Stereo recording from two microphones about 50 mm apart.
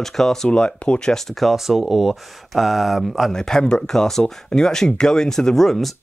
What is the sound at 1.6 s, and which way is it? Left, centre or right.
Speech, centre.